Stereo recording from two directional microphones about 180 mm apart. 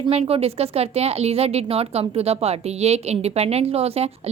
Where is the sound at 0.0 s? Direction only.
35° right (ahead or behind).